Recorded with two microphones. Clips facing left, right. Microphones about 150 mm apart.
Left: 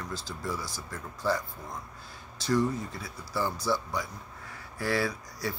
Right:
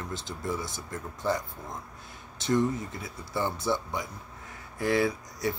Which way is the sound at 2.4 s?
20° right (ahead or behind).